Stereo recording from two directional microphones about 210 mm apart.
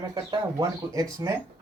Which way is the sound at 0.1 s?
20° right (ahead or behind).